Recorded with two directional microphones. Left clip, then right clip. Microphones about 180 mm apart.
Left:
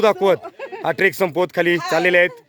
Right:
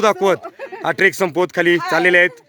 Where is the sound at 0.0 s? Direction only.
Centre (ahead or behind).